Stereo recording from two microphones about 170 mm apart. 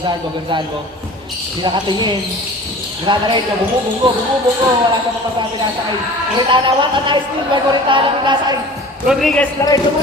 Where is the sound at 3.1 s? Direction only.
30° right (ahead or behind).